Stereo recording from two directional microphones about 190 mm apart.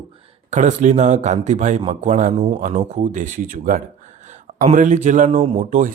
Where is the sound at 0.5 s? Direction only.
40° right (ahead or behind).